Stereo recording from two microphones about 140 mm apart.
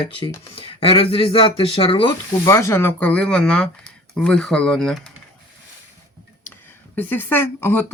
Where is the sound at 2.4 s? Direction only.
20° left (ahead or behind); by 5.1 s 5° left (ahead or behind).